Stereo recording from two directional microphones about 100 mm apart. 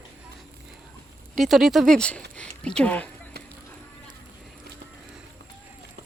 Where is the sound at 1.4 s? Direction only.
Centre (ahead or behind).